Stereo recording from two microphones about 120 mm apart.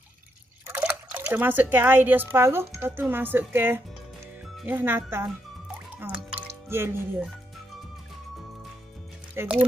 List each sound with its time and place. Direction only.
0.7 s speech: 15° right (ahead or behind)
5.9 s music: 10° right (ahead or behind)
6.7 s speech: 20° right (ahead or behind)
9.4 s speech: 20° right (ahead or behind)